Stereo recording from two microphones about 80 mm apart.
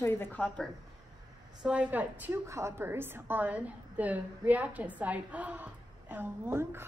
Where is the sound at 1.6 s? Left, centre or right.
Centre.